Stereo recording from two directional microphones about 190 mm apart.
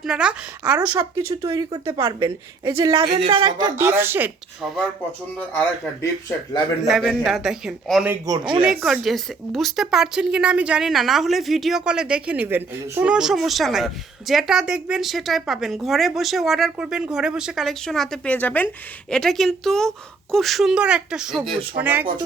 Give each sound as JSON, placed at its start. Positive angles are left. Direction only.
{"t": 0.0, "sound": "speech", "side_deg": -5}
{"t": 1.4, "sound": "speech", "side_deg": -20}
{"t": 6.8, "sound": "a woman's voice", "side_deg": 0}
{"t": 8.1, "sound": "a man's voice", "side_deg": -20}
{"t": 8.6, "sound": "a woman's voice", "side_deg": 0}